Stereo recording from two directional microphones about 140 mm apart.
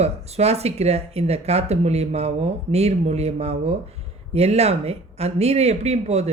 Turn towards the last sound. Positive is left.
turn(degrees=-50)  # may be behind; listen again after turning